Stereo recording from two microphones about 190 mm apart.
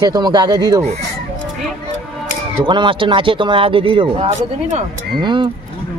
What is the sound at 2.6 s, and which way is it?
Speech, 25° right (ahead or behind).